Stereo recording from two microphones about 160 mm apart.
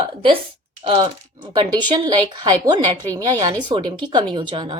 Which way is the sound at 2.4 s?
25° right (ahead or behind).